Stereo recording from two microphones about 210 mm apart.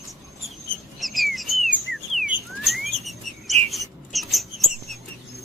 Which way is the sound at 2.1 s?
Centre (ahead or behind).